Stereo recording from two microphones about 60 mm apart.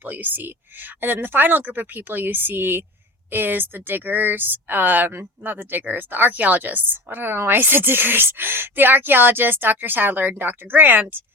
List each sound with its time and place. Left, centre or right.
0.0 s speech: right